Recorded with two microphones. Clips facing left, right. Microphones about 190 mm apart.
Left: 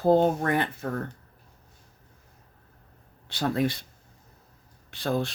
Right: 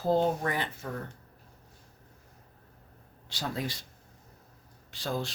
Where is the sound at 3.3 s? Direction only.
60° left (ahead or behind).